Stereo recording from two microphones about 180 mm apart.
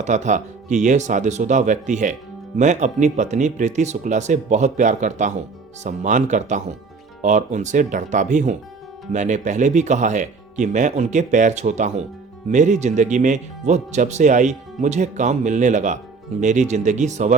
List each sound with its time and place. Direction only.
0.0 s speech: 40° right (ahead or behind)